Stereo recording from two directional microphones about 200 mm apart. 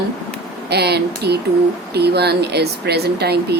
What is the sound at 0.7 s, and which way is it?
Speech, 55° right (ahead or behind).